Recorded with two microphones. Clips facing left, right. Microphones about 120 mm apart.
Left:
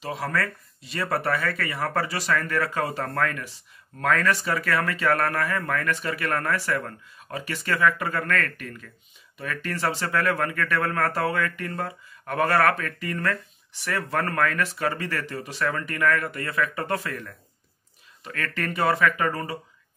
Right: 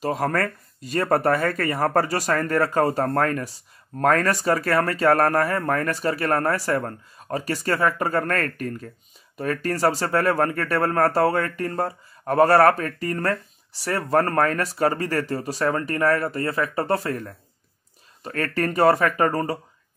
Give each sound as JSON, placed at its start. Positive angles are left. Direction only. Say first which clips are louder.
{"t": 0.0, "sound": "speech", "louder": "right 5 dB", "side_deg": -45}